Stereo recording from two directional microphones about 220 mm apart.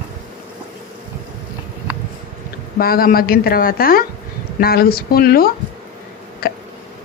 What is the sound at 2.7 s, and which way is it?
A woman's voice, 40° left (ahead or behind).